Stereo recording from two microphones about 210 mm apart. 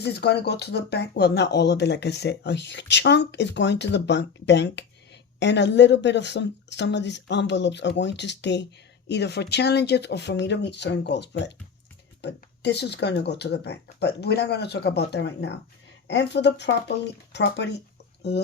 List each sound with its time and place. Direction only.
0.0 s speech: 50° left (ahead or behind)